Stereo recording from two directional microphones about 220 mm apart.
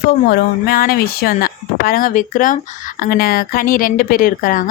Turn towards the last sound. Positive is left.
turn(degrees=40)  # may be behind; listen again after turning